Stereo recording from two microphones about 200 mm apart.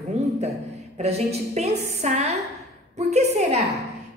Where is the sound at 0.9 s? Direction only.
30° right (ahead or behind).